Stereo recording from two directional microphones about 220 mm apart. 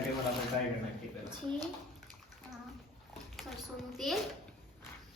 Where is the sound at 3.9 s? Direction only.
Centre (ahead or behind).